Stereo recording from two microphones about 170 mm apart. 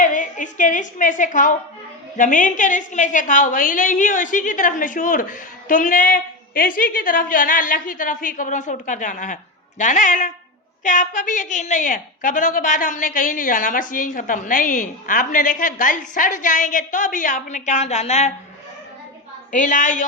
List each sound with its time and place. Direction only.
0.0 s a woman's voice: 50° left (ahead or behind)
19.5 s a woman's voice: 50° left (ahead or behind)